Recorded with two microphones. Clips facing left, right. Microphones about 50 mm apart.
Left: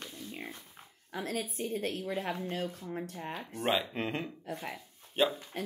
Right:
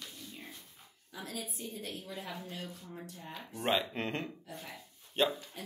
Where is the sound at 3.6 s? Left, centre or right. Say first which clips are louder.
Left 1 dB; centre.